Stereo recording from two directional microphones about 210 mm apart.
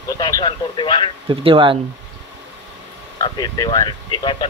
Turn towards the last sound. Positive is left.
turn(degrees=20)  # may be behind; listen again after turning